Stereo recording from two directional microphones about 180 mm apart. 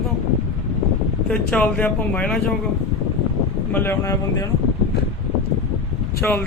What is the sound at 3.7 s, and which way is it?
Speech, 15° left (ahead or behind).